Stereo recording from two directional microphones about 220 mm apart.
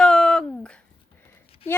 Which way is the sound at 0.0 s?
5° left (ahead or behind).